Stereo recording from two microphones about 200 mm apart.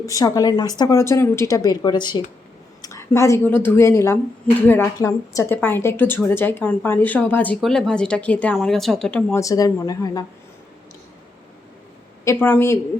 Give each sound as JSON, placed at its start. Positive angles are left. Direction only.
{"t": 0.0, "sound": "speech", "side_deg": 15}
{"t": 12.2, "sound": "speech", "side_deg": 10}